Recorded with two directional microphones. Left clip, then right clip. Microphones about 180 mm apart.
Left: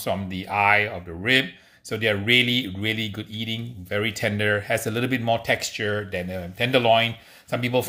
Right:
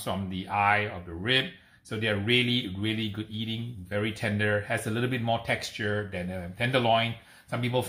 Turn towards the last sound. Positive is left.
turn(degrees=50)  # may be behind; listen again after turning